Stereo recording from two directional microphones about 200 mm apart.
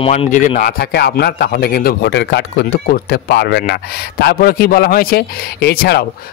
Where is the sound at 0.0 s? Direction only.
30° left (ahead or behind).